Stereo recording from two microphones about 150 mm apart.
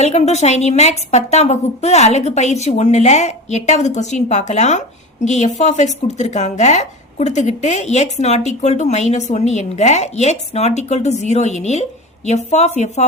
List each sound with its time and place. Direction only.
0.0 s a woman's voice: 45° left (ahead or behind)